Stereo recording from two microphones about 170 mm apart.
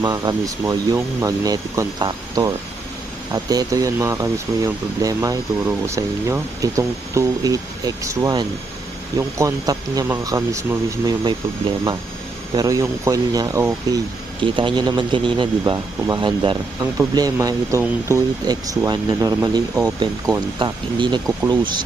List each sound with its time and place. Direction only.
0.0 s speech: 20° right (ahead or behind)
14.4 s speech: 30° right (ahead or behind)